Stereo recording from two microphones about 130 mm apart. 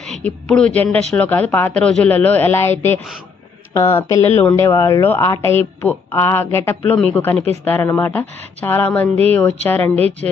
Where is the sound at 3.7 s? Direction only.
25° left (ahead or behind).